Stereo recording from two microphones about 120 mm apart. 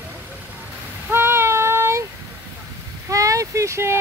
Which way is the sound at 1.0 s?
20° right (ahead or behind).